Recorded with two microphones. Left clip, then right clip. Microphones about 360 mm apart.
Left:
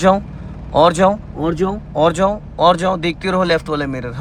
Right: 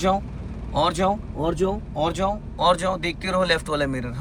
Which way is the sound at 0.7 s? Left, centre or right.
Centre.